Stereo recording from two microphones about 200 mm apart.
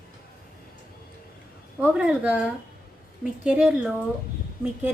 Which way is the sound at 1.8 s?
5° right (ahead or behind).